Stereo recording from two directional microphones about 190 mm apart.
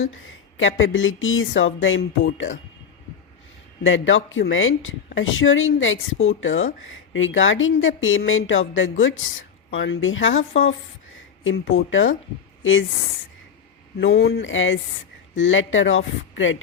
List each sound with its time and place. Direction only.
0.1 s a woman's voice: 90° left
3.8 s a woman's voice: 90° left
14.0 s a woman's voice: 85° left